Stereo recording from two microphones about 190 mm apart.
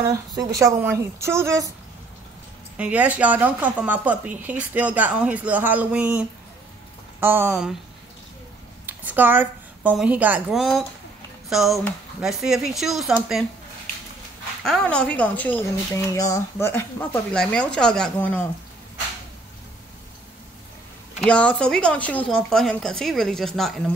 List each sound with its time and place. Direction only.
0.0 s speech: 20° right (ahead or behind)
2.8 s speech: 5° right (ahead or behind)
8.8 s a woman's voice: 10° right (ahead or behind)
14.6 s speech: 5° left (ahead or behind)
21.2 s speech: 5° left (ahead or behind)